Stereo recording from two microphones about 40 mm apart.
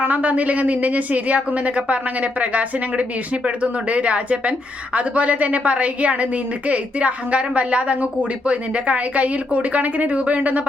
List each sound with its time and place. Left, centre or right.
0.0 s speech: right